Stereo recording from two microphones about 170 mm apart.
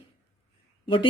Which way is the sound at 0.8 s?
30° left (ahead or behind).